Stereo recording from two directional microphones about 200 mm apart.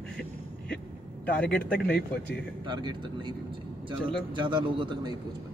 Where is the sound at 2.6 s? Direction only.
20° right (ahead or behind).